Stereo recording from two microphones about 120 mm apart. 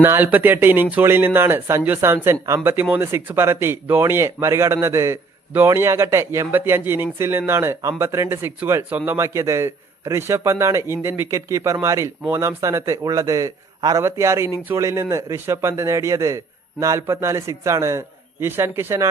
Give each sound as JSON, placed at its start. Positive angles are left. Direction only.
{"t": 0.0, "sound": "a man's voice", "side_deg": -20}